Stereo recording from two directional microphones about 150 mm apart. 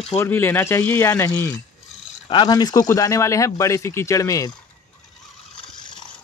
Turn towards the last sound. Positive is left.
turn(degrees=20)  # may be behind; listen again after turning